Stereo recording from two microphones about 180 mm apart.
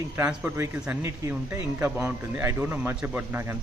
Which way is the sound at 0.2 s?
10° right (ahead or behind).